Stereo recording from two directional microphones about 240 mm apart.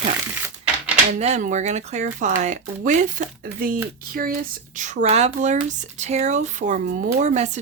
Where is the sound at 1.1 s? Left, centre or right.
Right.